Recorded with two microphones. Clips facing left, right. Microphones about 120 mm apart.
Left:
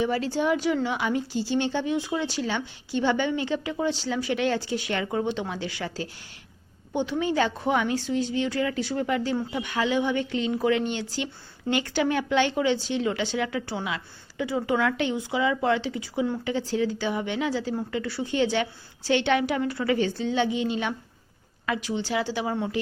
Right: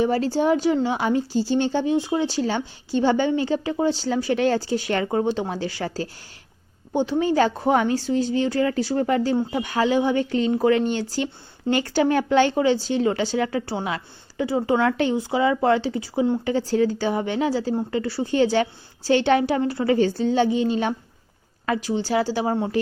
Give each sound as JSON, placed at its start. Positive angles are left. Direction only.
{"t": 0.0, "sound": "speech", "side_deg": -35}